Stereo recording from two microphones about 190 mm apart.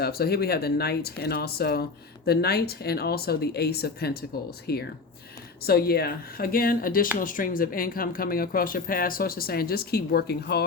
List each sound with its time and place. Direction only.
0.0 s speech: 55° left (ahead or behind)